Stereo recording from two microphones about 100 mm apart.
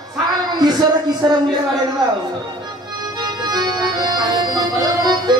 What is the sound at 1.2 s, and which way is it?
Speech, 50° right (ahead or behind).